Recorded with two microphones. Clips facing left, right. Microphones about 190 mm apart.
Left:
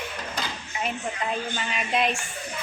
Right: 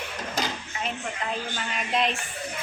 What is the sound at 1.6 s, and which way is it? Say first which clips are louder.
Speech: even; 5° left (ahead or behind).